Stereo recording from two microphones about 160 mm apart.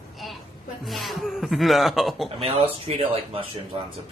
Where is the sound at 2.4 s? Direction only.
40° right (ahead or behind).